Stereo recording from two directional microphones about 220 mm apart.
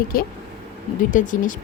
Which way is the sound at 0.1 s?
40° left (ahead or behind).